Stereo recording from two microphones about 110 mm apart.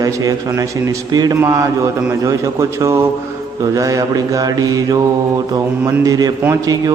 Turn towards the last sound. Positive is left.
turn(degrees=-35)  # may be behind; listen again after turning